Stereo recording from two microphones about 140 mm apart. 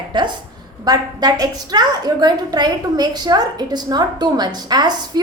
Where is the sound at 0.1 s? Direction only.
35° right (ahead or behind).